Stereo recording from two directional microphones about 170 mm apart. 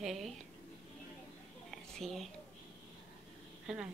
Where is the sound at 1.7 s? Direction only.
Centre (ahead or behind).